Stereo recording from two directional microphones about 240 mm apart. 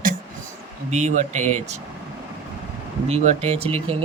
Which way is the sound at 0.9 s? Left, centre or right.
Right.